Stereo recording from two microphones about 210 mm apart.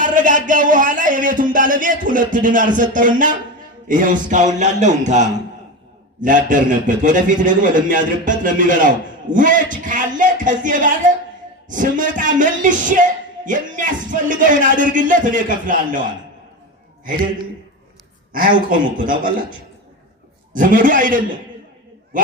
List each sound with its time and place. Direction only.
0.0 s speech: 40° right (ahead or behind)
18.3 s speech: 40° right (ahead or behind)